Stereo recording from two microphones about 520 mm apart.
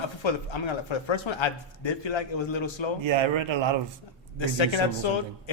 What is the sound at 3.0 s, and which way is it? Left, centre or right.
Speech, right.